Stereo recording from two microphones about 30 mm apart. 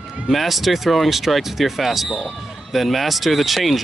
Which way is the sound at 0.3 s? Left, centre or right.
Centre.